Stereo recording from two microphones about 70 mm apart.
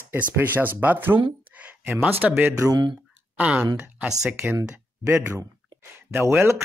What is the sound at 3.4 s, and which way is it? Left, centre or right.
Speech, centre.